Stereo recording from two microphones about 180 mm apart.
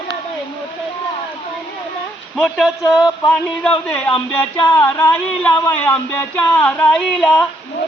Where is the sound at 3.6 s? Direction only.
5° left (ahead or behind).